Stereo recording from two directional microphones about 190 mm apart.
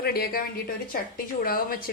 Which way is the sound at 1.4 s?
50° left (ahead or behind).